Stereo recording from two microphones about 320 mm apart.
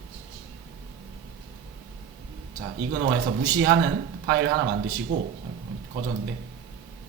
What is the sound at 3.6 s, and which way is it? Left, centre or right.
Speech, right.